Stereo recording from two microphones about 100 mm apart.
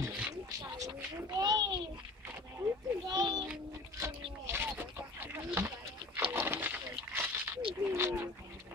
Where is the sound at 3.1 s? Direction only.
45° right (ahead or behind).